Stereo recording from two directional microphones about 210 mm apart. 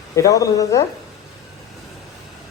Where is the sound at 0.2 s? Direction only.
15° left (ahead or behind).